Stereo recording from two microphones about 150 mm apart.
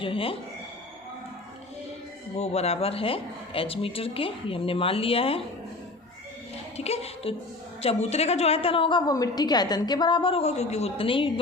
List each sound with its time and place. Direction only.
0.0 s a woman's voice: 35° left (ahead or behind)
2.4 s a woman's voice: 45° left (ahead or behind)
6.7 s a woman's voice: 45° left (ahead or behind)